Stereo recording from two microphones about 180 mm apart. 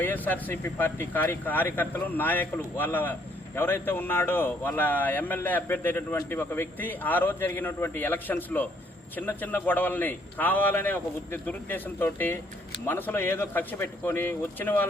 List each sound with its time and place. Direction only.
0.0 s speech: 10° left (ahead or behind)